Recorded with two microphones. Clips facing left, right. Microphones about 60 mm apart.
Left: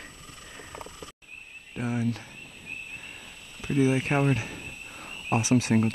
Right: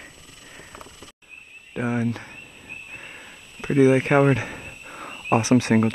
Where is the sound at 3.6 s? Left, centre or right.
Right.